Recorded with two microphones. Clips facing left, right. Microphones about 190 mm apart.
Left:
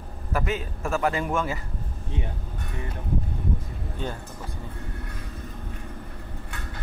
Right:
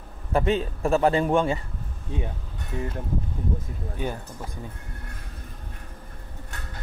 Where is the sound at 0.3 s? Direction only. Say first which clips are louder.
Right 5 dB; 30° right (ahead or behind).